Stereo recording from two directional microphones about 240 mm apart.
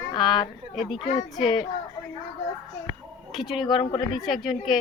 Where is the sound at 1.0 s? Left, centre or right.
Left.